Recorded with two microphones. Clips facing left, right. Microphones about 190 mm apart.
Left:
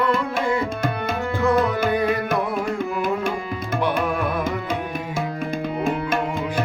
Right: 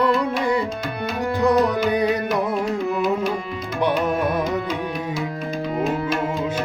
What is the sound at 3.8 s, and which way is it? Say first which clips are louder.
Carnatic music: right 3 dB; 20° right (ahead or behind).